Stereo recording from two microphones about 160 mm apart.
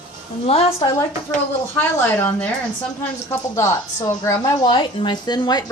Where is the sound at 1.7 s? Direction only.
10° left (ahead or behind).